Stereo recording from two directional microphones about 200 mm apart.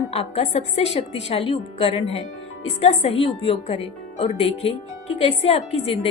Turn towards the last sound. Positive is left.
turn(degrees=30)  # may be behind; listen again after turning